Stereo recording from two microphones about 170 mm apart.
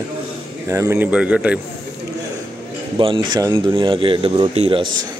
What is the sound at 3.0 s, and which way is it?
Speech, 30° right (ahead or behind).